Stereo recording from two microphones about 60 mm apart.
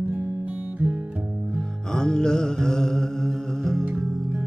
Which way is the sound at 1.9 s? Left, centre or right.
Centre.